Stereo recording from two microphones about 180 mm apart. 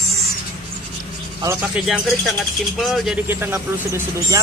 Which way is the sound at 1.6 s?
Centre (ahead or behind).